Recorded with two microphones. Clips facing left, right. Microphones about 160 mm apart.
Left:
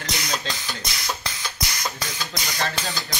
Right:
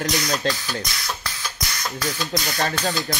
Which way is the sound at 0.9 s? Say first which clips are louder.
Even; 20° left (ahead or behind).